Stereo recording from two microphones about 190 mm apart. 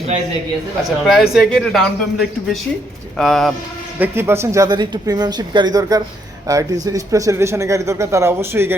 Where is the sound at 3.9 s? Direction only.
10° right (ahead or behind).